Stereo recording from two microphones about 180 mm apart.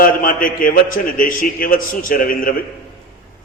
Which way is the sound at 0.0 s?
50° left (ahead or behind).